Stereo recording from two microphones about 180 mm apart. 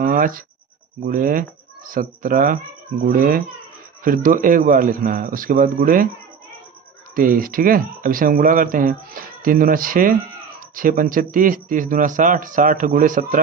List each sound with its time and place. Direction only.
0.0 s speech: 50° right (ahead or behind)
7.2 s speech: 50° right (ahead or behind)